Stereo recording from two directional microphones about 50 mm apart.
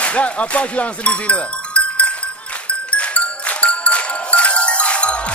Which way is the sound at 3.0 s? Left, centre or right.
Left.